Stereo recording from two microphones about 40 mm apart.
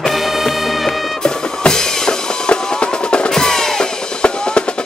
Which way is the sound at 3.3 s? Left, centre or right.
Centre.